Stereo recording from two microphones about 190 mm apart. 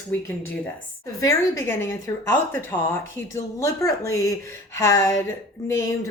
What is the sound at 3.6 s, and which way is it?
A woman's voice, 15° left (ahead or behind).